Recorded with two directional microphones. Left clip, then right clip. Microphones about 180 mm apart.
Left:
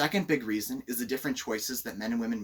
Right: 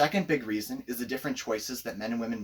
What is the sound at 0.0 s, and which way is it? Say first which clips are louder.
Speech: right 2 dB; 15° right (ahead or behind).